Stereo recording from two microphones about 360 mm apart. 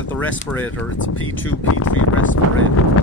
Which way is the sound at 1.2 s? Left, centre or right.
Left.